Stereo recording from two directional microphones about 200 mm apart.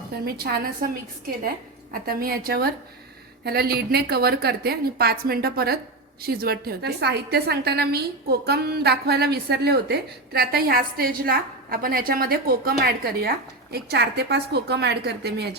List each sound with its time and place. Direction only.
0.3 s a woman's voice: 50° right (ahead or behind)
1.9 s a woman's voice: 50° right (ahead or behind)